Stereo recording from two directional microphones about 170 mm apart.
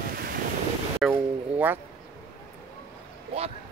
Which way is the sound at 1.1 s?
10° right (ahead or behind).